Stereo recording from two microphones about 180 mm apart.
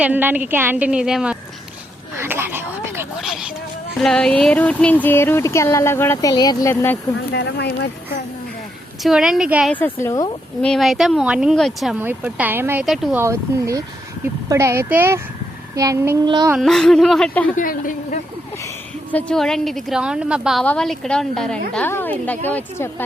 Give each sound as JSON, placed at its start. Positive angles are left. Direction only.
{"t": 0.0, "sound": "a woman's voice", "side_deg": -10}
{"t": 2.1, "sound": "a sound", "side_deg": -10}
{"t": 3.2, "sound": "a woman's voice", "side_deg": 0}
{"t": 7.3, "sound": "speech", "side_deg": 70}
{"t": 9.0, "sound": "a woman's voice", "side_deg": 0}
{"t": 9.7, "sound": "speech", "side_deg": 10}
{"t": 10.6, "sound": "a woman's voice", "side_deg": 0}
{"t": 11.9, "sound": "a woman's voice", "side_deg": -10}
{"t": 12.8, "sound": "a woman's voice", "side_deg": 0}
{"t": 13.2, "sound": "a woman's voice", "side_deg": -15}
{"t": 15.7, "sound": "child singing", "side_deg": -20}
{"t": 16.6, "sound": "a woman's voice", "side_deg": 0}
{"t": 17.5, "sound": "speech", "side_deg": 50}
{"t": 19.1, "sound": "a woman's voice", "side_deg": 5}